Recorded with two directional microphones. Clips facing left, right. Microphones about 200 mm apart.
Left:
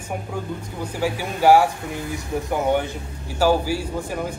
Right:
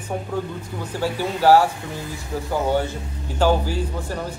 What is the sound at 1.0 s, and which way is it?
Speech, 10° left (ahead or behind).